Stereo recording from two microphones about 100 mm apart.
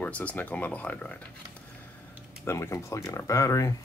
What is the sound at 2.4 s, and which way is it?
Speech, 30° left (ahead or behind).